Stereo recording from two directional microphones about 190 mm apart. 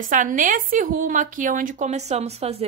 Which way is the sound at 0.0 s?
45° right (ahead or behind).